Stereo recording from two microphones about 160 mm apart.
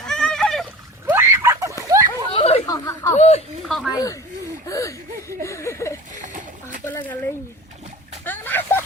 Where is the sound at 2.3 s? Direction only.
40° left (ahead or behind).